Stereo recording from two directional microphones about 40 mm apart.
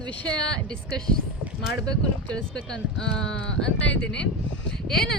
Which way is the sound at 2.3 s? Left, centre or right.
Left.